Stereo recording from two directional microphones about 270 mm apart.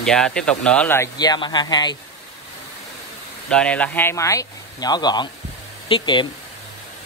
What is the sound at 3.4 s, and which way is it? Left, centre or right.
Speech, centre.